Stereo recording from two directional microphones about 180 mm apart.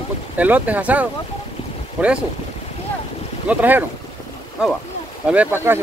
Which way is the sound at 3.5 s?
10° right (ahead or behind).